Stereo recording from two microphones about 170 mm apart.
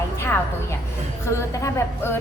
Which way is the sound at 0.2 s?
15° left (ahead or behind).